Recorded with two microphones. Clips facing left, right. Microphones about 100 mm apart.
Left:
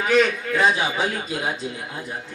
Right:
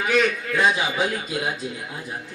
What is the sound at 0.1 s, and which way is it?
Speech, centre (ahead or behind).